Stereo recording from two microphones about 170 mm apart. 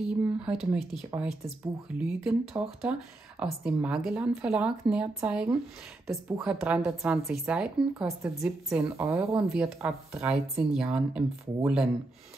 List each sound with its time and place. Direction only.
0.0 s speech: 5° right (ahead or behind)